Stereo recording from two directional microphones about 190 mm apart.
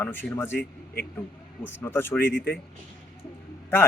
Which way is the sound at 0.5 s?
50° left (ahead or behind).